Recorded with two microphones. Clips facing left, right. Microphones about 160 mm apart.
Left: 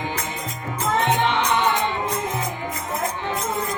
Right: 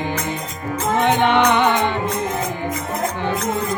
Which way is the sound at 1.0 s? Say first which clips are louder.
Right 8 dB; 65° right (ahead or behind).